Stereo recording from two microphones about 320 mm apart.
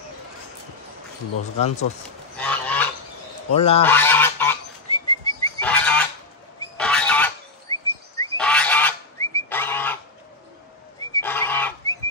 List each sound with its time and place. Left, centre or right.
2.3 s goose: centre
3.5 s goose: centre
3.8 s goose: centre
6.8 s a sound: centre
11.1 s goose: centre